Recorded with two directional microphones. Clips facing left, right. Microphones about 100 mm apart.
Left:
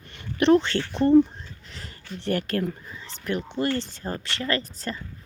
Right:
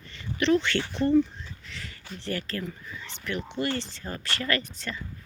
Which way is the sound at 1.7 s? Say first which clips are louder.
Even; 45° left (ahead or behind).